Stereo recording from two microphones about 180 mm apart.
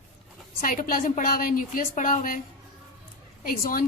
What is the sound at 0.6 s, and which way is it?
A woman's voice, 50° left (ahead or behind).